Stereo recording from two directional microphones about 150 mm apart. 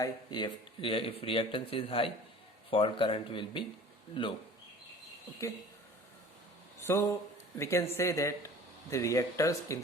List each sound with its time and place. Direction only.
0.0 s speech: 30° left (ahead or behind)
6.8 s speech: 20° left (ahead or behind)